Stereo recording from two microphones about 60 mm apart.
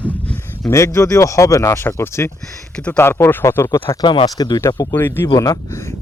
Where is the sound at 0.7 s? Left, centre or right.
Left.